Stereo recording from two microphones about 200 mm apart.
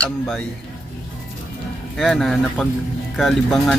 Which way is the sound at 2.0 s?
Centre (ahead or behind).